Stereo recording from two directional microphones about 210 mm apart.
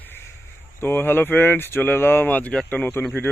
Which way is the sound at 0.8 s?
10° left (ahead or behind).